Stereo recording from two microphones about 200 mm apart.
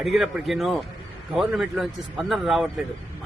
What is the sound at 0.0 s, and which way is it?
A man's voice, centre (ahead or behind).